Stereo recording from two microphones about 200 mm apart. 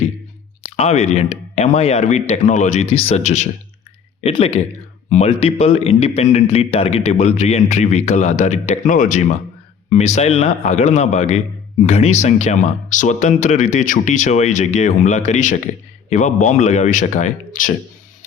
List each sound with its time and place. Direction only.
0.8 s a man's voice: 35° left (ahead or behind)